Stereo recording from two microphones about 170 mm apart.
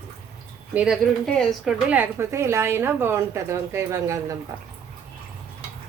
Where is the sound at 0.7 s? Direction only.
10° right (ahead or behind).